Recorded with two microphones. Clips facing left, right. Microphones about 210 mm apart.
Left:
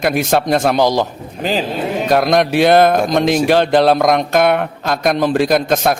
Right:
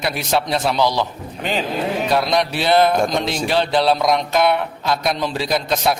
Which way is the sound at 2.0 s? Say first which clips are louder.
Left 7 dB; 50° left (ahead or behind).